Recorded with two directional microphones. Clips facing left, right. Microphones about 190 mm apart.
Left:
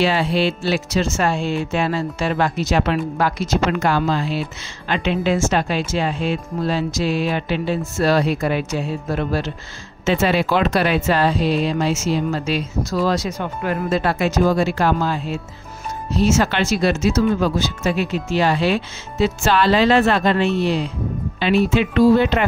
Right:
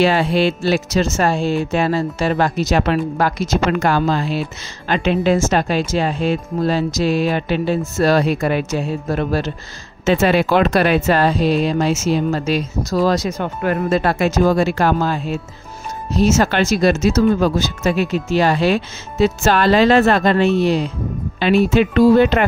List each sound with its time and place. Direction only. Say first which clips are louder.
0.0 s speech: right 3 dB; 45° right (ahead or behind)
10.0 s speech: right 3 dB; 55° right (ahead or behind)